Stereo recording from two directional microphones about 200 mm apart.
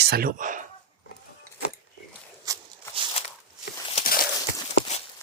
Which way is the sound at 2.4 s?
20° right (ahead or behind).